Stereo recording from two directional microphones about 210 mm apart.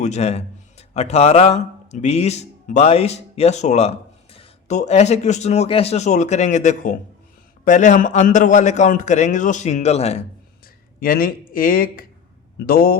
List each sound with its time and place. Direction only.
0.0 s a man's voice: 30° left (ahead or behind)
11.0 s speech: 45° left (ahead or behind)